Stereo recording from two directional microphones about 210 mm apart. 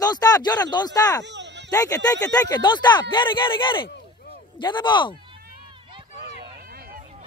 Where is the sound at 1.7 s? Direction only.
15° left (ahead or behind).